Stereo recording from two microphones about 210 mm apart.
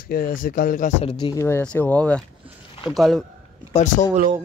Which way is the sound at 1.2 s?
15° left (ahead or behind).